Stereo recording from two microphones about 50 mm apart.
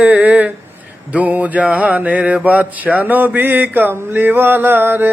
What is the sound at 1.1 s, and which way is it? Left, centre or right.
Mantra, right.